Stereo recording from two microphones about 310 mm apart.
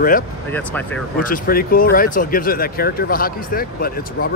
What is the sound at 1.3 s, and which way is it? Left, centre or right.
Speech, left.